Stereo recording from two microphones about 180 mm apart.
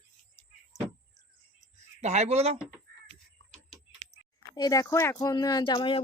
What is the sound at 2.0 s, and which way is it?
Speech, 40° right (ahead or behind).